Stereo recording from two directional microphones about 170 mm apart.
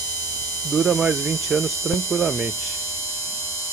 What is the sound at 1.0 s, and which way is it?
Hum, 15° right (ahead or behind).